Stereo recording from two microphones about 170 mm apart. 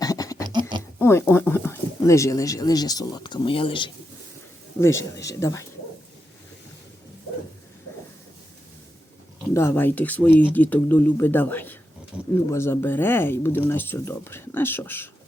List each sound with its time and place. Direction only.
0.0 s a sound: 20° left (ahead or behind)
0.9 s speech: 15° left (ahead or behind)
4.8 s speech: 15° left (ahead or behind)
9.5 s speech: 15° left (ahead or behind)
12.1 s speech: 5° right (ahead or behind)
12.5 s speech: 15° left (ahead or behind)